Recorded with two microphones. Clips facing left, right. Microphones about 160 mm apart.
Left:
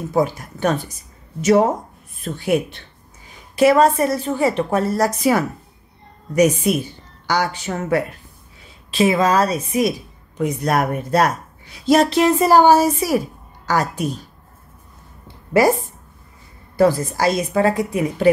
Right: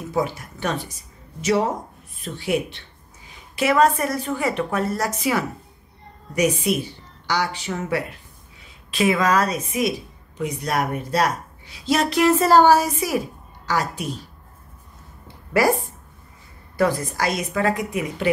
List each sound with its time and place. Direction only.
0.1 s speech: 45° left (ahead or behind)
3.5 s a woman's voice: 35° left (ahead or behind)
6.7 s speech: 45° left (ahead or behind)
8.9 s a woman's voice: 30° left (ahead or behind); by 12.1 s 45° left (ahead or behind)
12.1 s speech: 20° left (ahead or behind)
12.7 s a woman's voice: 30° left (ahead or behind)
13.7 s speech: 45° left (ahead or behind)
16.7 s a woman's voice: 30° left (ahead or behind)